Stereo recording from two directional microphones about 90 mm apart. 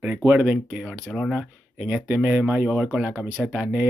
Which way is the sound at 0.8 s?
Centre (ahead or behind).